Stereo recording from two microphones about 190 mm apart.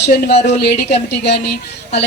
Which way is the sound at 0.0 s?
60° left (ahead or behind).